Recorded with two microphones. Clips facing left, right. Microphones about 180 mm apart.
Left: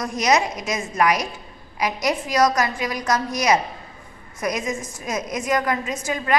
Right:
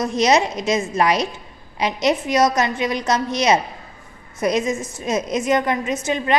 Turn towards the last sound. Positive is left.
turn(degrees=-25)  # may be behind; listen again after turning